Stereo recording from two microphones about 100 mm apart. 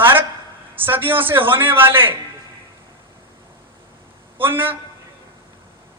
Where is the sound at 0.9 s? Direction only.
20° right (ahead or behind).